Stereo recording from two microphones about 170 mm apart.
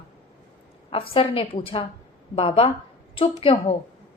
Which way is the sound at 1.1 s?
35° left (ahead or behind).